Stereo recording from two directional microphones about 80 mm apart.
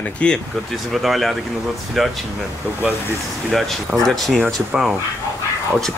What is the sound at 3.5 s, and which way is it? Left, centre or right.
Speech, centre.